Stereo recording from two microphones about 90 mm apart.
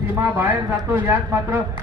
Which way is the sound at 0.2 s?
20° right (ahead or behind).